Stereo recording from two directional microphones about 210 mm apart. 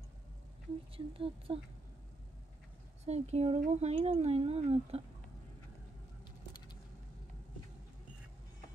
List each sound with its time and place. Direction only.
0.9 s speech: 25° right (ahead or behind)
3.1 s speech: 30° right (ahead or behind)